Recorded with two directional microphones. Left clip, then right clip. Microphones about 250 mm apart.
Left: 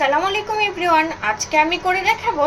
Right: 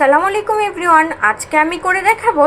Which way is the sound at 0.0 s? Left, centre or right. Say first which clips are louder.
Right 6 dB; centre.